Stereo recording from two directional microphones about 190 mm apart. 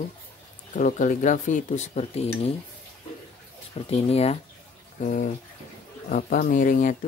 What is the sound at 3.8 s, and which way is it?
Speech, 35° left (ahead or behind).